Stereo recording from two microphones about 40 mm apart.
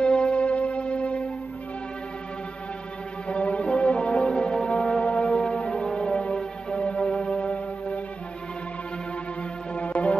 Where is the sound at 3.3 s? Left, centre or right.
Left.